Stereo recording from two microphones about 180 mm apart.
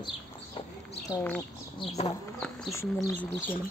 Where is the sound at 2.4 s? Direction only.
5° left (ahead or behind).